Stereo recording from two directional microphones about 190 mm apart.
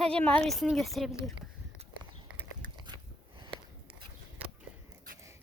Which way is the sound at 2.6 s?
45° right (ahead or behind).